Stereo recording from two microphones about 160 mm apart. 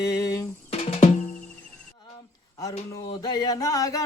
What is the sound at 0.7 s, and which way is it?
Music, 45° left (ahead or behind).